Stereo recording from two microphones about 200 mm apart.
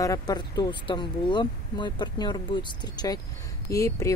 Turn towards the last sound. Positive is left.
turn(degrees=15)  # may be behind; listen again after turning